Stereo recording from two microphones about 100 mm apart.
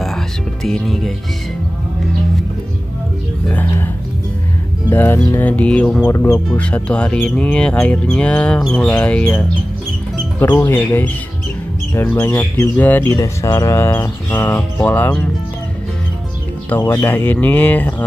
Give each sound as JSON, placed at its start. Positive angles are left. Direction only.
{"t": 0.7, "sound": "speech", "side_deg": 5}
{"t": 3.4, "sound": "music", "side_deg": 20}
{"t": 4.9, "sound": "speech", "side_deg": 25}
{"t": 6.0, "sound": "speech", "side_deg": 25}
{"t": 6.6, "sound": "speech", "side_deg": 10}
{"t": 10.4, "sound": "speech", "side_deg": 25}
{"t": 12.1, "sound": "speech", "side_deg": 20}
{"t": 13.1, "sound": "speech", "side_deg": 30}
{"t": 16.6, "sound": "speech", "side_deg": 20}